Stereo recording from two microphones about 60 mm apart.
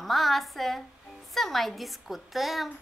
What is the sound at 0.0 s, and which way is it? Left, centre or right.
A woman's voice, centre.